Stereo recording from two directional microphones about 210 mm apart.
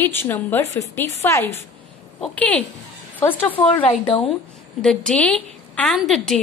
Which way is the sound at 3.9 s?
25° left (ahead or behind).